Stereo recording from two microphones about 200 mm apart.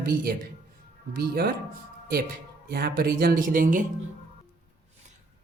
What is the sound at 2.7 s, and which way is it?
Speech, 50° right (ahead or behind).